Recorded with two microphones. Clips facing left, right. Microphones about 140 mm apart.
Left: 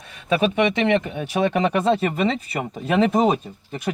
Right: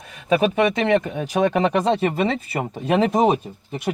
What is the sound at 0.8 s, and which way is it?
Speech, 35° right (ahead or behind).